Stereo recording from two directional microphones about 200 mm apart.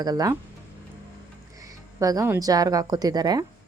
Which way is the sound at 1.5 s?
15° right (ahead or behind).